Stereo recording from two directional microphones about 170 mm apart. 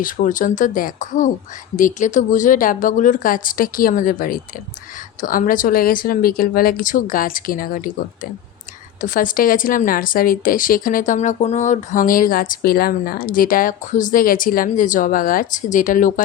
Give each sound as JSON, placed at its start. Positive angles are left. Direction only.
{"t": 0.0, "sound": "a woman's voice", "side_deg": 50}